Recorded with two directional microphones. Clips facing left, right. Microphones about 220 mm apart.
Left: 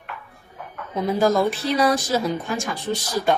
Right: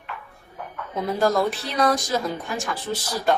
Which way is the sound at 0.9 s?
Centre (ahead or behind).